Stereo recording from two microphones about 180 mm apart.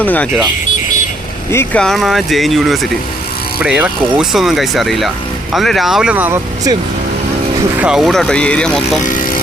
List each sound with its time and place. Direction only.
0.0 s speech: 10° left (ahead or behind)
1.5 s speech: 10° left (ahead or behind); by 6.7 s 10° right (ahead or behind)
7.8 s speech: 5° right (ahead or behind)
9.0 s vehicle: 50° left (ahead or behind)